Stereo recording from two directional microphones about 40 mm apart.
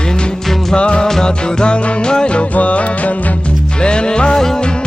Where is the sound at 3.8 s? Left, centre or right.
Left.